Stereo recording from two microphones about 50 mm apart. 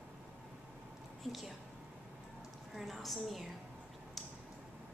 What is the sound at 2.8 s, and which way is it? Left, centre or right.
Speech, centre.